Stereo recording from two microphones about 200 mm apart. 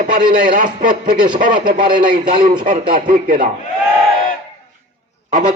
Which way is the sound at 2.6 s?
45° right (ahead or behind).